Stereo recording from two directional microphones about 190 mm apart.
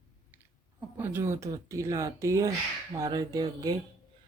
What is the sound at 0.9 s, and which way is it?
Speech, 10° right (ahead or behind).